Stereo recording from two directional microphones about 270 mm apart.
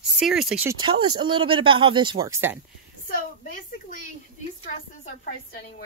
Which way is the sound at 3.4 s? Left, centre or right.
Left.